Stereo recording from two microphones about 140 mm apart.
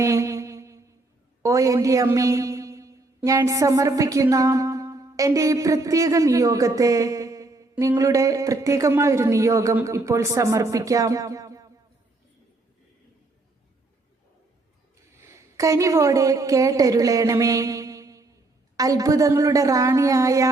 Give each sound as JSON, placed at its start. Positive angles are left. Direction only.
{"t": 0.0, "sound": "music", "side_deg": -20}
{"t": 1.4, "sound": "a man's voice", "side_deg": -20}
{"t": 3.2, "sound": "music", "side_deg": -25}
{"t": 15.5, "sound": "a woman's voice", "side_deg": -20}
{"t": 18.8, "sound": "music", "side_deg": -25}